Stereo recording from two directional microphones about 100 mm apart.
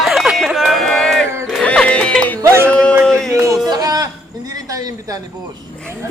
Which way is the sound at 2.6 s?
10° left (ahead or behind).